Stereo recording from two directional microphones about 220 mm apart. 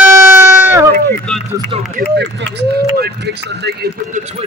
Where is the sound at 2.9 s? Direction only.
45° right (ahead or behind).